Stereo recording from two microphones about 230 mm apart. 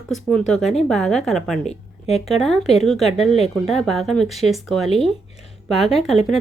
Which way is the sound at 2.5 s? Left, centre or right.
Left.